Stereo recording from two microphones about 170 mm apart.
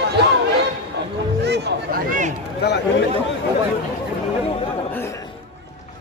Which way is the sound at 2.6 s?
80° left.